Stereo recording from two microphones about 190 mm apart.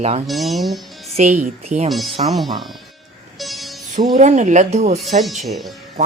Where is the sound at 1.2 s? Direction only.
35° right (ahead or behind).